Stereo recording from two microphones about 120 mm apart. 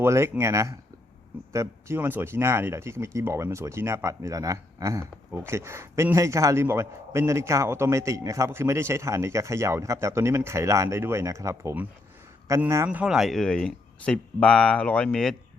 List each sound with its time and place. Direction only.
0.0 s speech: 20° right (ahead or behind); by 15.4 s 5° left (ahead or behind)